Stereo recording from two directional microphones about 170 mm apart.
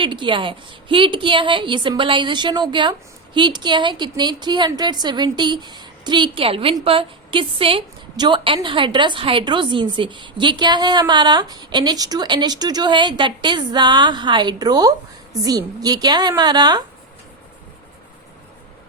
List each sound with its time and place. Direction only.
0.0 s a woman's voice: 30° right (ahead or behind)